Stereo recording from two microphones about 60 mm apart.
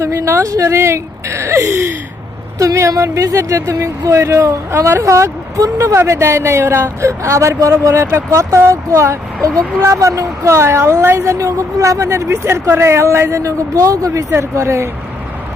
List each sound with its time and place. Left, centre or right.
0.0 s speech: right
4.7 s speech: right
6.1 s speech: right
7.0 s speech: right
8.7 s speech: right
11.2 s speech: right